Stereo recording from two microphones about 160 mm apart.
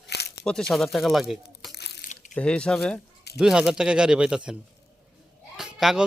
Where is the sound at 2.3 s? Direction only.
5° left (ahead or behind).